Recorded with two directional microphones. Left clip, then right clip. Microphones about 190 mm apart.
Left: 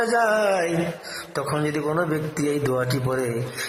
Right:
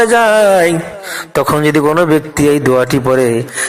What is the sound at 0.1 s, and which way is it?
A man's voice, 35° right (ahead or behind).